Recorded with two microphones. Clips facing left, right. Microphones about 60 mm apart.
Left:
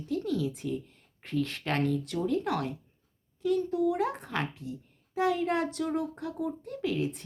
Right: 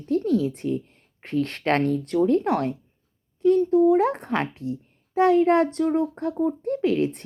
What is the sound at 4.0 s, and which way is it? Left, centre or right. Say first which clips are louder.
A child's voice: right 8 dB; right.